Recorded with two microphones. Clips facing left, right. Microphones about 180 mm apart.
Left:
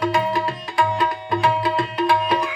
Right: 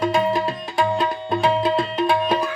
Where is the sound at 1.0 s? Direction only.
25° right (ahead or behind).